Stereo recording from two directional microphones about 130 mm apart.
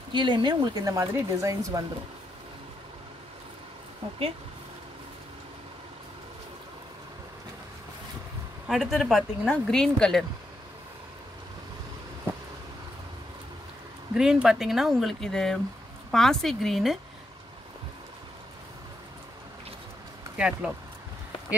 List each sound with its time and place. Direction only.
0.1 s speech: 35° right (ahead or behind)
8.6 s speech: centre (ahead or behind)
14.1 s speech: 5° right (ahead or behind)
20.3 s speech: 10° right (ahead or behind)